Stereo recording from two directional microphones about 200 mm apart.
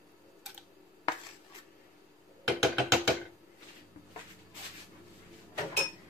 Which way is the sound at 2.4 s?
Centre (ahead or behind).